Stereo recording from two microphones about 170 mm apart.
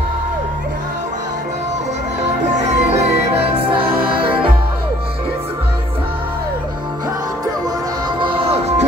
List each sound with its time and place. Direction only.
2.5 s music: 40° right (ahead or behind)
8.2 s music: 35° right (ahead or behind)